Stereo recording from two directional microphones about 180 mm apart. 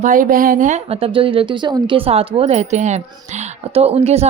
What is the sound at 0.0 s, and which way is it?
Speech, 50° right (ahead or behind).